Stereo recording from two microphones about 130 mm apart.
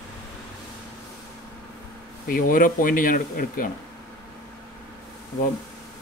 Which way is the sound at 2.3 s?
90° left.